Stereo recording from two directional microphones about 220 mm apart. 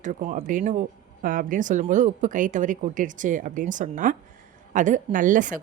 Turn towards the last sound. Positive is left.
turn(degrees=-35)  # may be behind; listen again after turning